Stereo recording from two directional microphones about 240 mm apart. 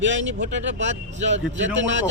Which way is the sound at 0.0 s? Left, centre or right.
Right.